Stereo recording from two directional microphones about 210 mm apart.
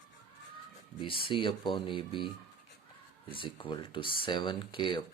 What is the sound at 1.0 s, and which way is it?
Speech, 25° left (ahead or behind).